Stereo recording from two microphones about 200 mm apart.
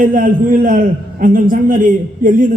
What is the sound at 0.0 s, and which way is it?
A man's voice, 45° right (ahead or behind).